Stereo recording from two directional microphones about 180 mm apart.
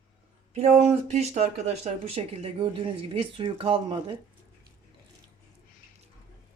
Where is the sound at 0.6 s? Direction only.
40° right (ahead or behind).